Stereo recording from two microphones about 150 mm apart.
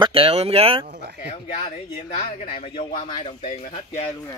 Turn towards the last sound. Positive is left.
turn(degrees=45)  # may be behind; listen again after turning